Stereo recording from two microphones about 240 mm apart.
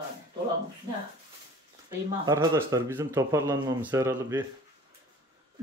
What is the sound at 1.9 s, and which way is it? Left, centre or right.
Speech, centre.